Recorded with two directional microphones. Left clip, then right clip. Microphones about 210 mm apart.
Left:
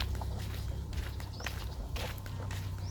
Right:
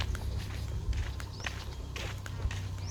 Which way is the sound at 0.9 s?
20° left (ahead or behind).